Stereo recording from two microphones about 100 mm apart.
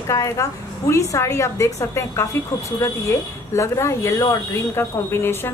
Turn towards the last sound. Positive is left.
turn(degrees=25)  # may be behind; listen again after turning